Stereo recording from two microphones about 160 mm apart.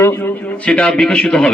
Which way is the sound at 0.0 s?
15° left (ahead or behind).